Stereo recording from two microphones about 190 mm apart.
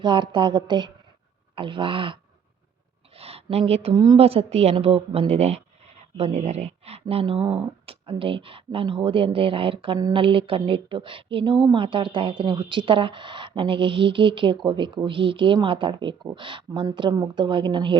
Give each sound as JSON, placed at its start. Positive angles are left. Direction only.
{"t": 0.0, "sound": "a woman's voice", "side_deg": -25}
{"t": 3.2, "sound": "a woman's voice", "side_deg": -30}